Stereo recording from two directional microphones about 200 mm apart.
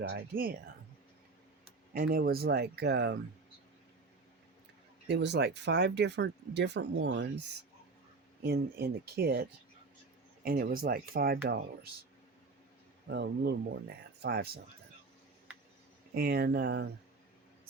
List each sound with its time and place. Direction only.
0.1 s speech: 50° right (ahead or behind)
1.9 s speech: 50° right (ahead or behind)
5.0 s speech: 55° right (ahead or behind)
8.4 s speech: 55° right (ahead or behind)
13.1 s speech: 60° right (ahead or behind)
16.1 s speech: 50° right (ahead or behind)